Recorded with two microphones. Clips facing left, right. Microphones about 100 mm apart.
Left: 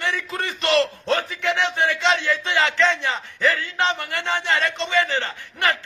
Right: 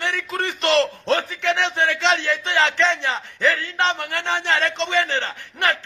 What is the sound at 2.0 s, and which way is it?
Speech, 25° right (ahead or behind).